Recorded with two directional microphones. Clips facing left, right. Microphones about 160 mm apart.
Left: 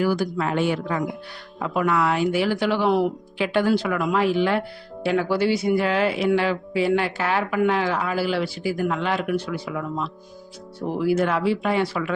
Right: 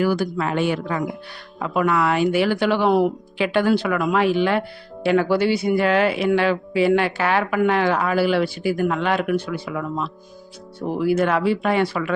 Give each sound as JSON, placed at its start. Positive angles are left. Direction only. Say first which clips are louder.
{"t": 0.0, "sound": "speech", "louder": "right 2 dB", "side_deg": -65}
{"t": 1.7, "sound": "speech", "louder": "right 2 dB", "side_deg": -65}
{"t": 3.3, "sound": "speech", "louder": "right 1 dB", "side_deg": -75}
{"t": 11.0, "sound": "speech", "louder": "right 2 dB", "side_deg": -60}